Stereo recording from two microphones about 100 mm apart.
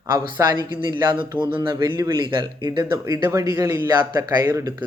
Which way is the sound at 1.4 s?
55° right (ahead or behind).